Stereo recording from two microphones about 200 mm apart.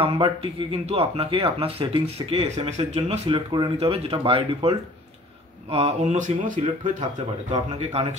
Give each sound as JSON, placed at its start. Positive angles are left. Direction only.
{"t": 0.0, "sound": "speech", "side_deg": -25}
{"t": 8.0, "sound": "speech", "side_deg": -30}